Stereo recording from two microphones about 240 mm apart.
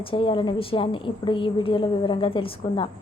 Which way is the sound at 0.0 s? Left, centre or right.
Left.